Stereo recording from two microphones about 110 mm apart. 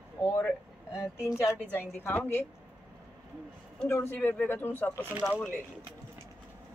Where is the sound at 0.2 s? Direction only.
20° left (ahead or behind).